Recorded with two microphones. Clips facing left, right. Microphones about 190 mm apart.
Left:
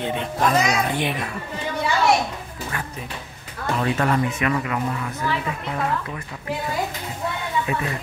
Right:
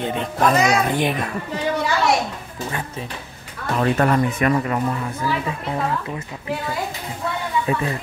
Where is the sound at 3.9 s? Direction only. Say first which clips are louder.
Right 3 dB; 40° right (ahead or behind).